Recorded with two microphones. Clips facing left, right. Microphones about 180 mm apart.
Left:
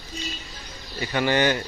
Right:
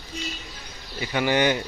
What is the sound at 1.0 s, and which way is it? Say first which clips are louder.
Speech: even; 10° right (ahead or behind).